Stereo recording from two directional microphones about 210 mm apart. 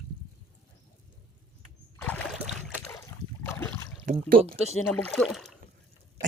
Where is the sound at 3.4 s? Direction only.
10° left (ahead or behind).